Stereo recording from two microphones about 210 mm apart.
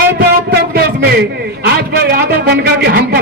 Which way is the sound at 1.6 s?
50° right (ahead or behind).